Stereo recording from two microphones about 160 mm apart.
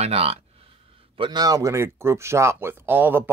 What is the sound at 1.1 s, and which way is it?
Speech, 30° right (ahead or behind).